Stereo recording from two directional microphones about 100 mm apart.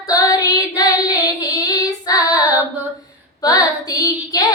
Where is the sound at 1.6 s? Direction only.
40° left (ahead or behind).